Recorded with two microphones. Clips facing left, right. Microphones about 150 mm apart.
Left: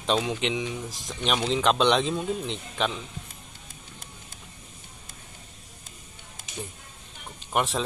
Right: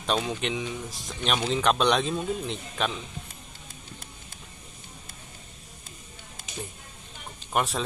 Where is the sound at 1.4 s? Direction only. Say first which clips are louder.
Left 1 dB; 5° right (ahead or behind).